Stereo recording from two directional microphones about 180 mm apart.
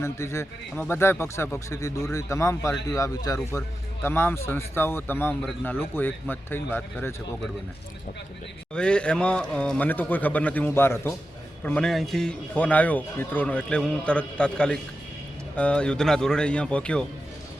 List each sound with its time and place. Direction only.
0.0 s speech: 15° left (ahead or behind)
8.7 s a man's voice: 5° left (ahead or behind)